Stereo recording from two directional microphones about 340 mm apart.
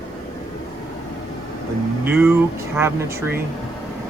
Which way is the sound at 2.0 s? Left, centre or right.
Centre.